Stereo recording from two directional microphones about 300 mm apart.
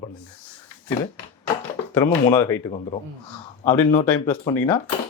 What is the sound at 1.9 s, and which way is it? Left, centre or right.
Speech, centre.